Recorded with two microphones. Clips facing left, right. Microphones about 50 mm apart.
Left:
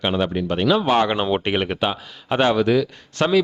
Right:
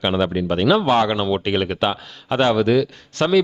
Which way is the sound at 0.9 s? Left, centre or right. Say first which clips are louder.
Right 1 dB; centre.